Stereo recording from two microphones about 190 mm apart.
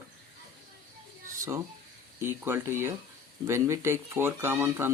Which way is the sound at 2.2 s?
10° right (ahead or behind).